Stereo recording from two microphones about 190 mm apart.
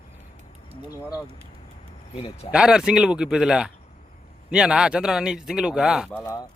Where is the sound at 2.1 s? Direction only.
30° left (ahead or behind).